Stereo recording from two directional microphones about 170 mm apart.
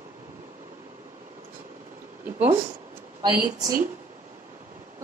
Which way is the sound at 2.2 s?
10° right (ahead or behind).